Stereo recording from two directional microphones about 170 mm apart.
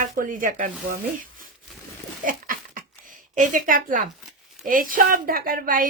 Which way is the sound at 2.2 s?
55° right (ahead or behind).